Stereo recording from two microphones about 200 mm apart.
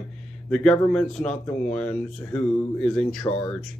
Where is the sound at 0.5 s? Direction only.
5° left (ahead or behind).